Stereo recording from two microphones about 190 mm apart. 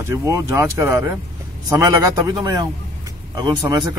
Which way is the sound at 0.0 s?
15° right (ahead or behind).